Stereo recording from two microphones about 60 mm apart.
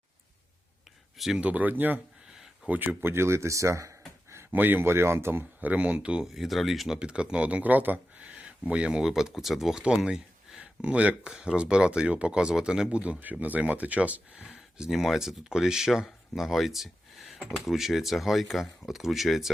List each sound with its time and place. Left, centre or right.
1.4 s speech: right
2.2 s a sound: centre
2.6 s speech: right
3.0 s speech: right
4.5 s speech: right
6.2 s speech: centre
7.0 s speech: centre
13.0 s speech: right
14.8 s speech: centre
16.0 s a sound: centre
17.4 s speech: centre